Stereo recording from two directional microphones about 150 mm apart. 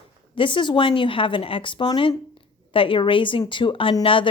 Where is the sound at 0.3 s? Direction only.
35° left (ahead or behind).